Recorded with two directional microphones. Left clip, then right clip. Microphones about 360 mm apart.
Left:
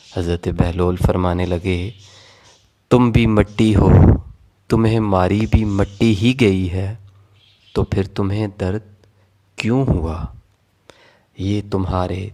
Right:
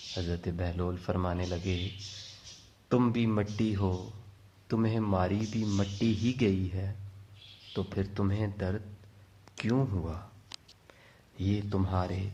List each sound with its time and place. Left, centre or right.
0.1 s speech: left
2.9 s speech: left